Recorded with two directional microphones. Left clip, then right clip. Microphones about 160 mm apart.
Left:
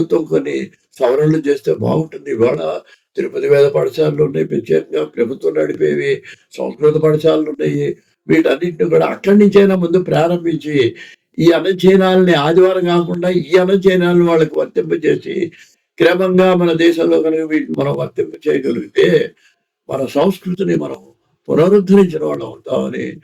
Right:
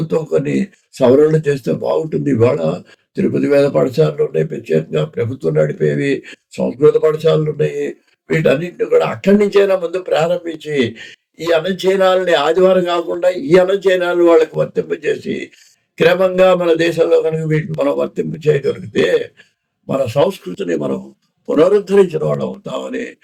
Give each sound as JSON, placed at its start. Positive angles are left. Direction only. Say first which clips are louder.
{"t": 0.1, "sound": "speech", "louder": "left 1 dB", "side_deg": -10}